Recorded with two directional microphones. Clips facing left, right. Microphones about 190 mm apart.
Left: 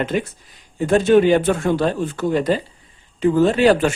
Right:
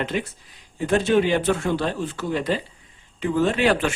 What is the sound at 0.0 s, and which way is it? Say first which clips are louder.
Speech: left 5 dB; 45° left (ahead or behind).